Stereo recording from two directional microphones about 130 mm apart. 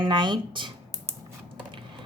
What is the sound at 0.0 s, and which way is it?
Speech, 35° right (ahead or behind).